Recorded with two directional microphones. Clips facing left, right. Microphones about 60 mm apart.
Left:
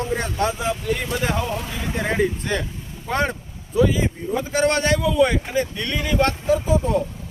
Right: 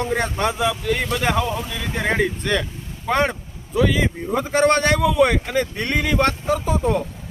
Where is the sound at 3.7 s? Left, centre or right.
Right.